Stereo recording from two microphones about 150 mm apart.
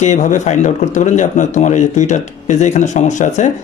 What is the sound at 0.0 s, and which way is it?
Speech, 50° left (ahead or behind).